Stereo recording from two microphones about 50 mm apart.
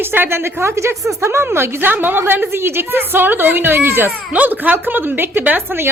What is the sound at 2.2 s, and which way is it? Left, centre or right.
A woman's voice, right.